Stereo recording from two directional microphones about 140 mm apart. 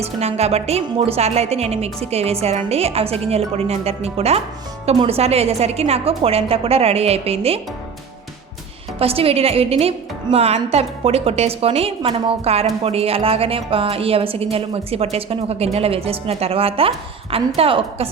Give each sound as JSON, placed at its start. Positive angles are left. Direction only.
{"t": 0.0, "sound": "a woman's voice", "side_deg": -50}
{"t": 9.0, "sound": "a woman's voice", "side_deg": -45}